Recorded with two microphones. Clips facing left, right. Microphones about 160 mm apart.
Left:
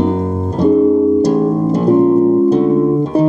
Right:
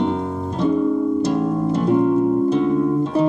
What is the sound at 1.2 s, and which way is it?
Harp, 40° left (ahead or behind).